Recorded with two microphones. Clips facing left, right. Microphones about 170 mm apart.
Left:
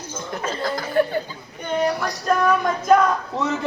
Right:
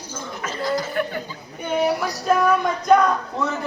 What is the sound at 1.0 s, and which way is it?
Speech, 30° left (ahead or behind).